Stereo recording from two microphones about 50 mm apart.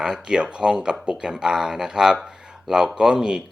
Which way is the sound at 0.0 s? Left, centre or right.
Centre.